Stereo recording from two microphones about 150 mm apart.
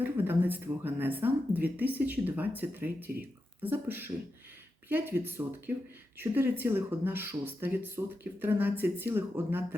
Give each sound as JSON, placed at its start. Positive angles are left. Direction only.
{"t": 0.0, "sound": "speech", "side_deg": -15}